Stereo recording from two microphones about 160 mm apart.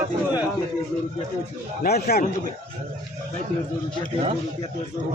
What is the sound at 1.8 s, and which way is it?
Speech, 75° left (ahead or behind).